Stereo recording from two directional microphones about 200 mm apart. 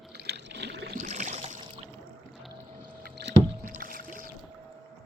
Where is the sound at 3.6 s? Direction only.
45° right (ahead or behind).